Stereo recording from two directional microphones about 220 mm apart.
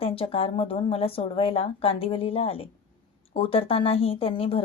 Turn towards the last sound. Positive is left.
turn(degrees=25)  # may be behind; listen again after turning